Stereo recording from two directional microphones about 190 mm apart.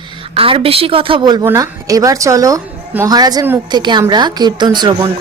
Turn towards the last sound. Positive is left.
turn(degrees=-20)  # may be behind; listen again after turning